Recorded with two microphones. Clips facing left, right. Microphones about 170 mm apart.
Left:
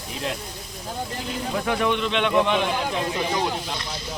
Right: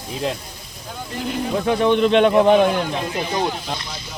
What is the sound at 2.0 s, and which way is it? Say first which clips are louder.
Speech: right 7 dB; 40° right (ahead or behind).